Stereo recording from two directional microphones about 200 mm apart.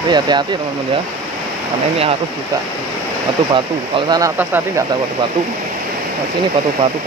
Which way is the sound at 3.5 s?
20° right (ahead or behind).